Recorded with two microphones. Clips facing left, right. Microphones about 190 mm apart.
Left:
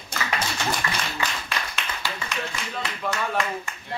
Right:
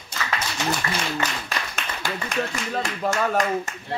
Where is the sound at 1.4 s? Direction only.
45° right (ahead or behind).